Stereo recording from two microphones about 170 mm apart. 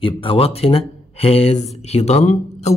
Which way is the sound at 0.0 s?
30° left (ahead or behind).